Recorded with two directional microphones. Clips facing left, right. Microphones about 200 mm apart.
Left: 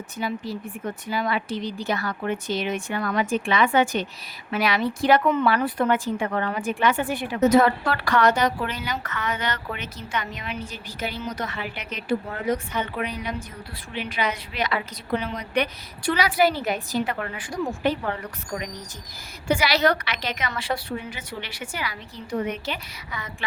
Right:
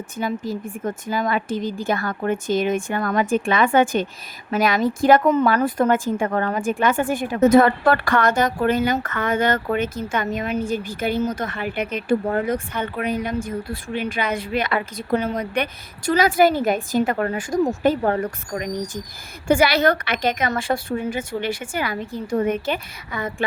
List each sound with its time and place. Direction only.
0.2 s speech: 45° right (ahead or behind)